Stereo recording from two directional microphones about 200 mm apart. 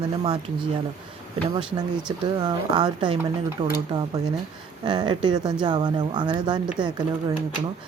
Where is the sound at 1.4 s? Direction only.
25° right (ahead or behind).